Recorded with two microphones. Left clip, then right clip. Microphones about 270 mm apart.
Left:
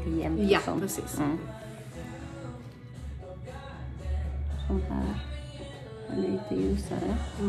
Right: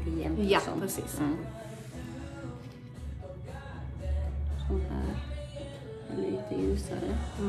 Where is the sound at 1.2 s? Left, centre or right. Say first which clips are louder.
Left 2 dB; left.